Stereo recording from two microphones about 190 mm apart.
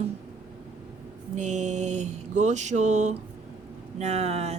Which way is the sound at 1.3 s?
40° right (ahead or behind).